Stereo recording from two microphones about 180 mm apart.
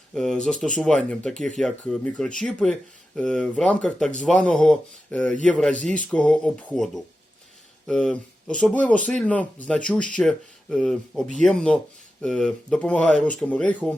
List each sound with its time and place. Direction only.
0.1 s speech: 5° left (ahead or behind)